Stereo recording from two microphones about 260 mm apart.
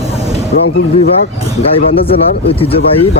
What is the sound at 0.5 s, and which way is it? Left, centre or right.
Speech, left.